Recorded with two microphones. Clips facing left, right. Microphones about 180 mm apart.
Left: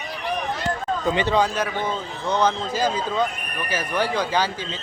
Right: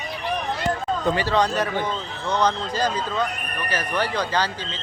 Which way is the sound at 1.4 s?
5° left (ahead or behind).